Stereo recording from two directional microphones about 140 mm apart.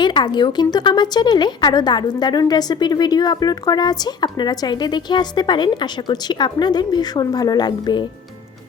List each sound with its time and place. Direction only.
0.0 s a woman's voice: 30° left (ahead or behind)